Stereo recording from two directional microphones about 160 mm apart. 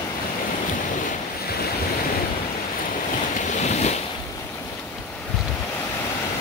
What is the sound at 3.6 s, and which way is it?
Waves, 45° left (ahead or behind).